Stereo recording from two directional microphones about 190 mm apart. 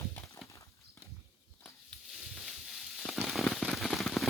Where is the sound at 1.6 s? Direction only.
Centre (ahead or behind).